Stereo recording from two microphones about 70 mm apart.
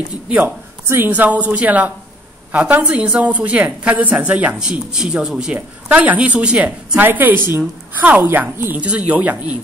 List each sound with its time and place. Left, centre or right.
0.8 s a woman's voice: right
4.6 s speech: centre
7.0 s a woman's voice: right
8.7 s a woman's voice: centre